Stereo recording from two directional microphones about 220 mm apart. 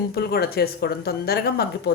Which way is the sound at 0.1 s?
45° left (ahead or behind).